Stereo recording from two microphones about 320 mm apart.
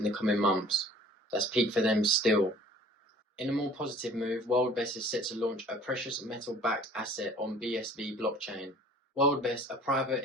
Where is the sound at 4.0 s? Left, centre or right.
Centre.